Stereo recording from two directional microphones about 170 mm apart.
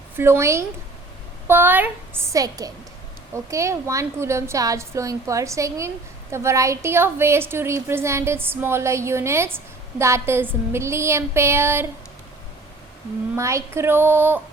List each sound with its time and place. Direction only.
0.2 s a woman's voice: 15° right (ahead or behind)
13.3 s a woman's voice: 15° right (ahead or behind)